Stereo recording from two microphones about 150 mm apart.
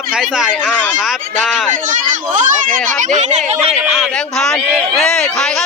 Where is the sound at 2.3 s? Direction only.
60° right (ahead or behind).